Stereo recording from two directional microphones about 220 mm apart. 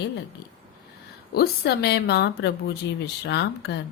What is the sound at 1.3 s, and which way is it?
A woman's voice, 45° left (ahead or behind).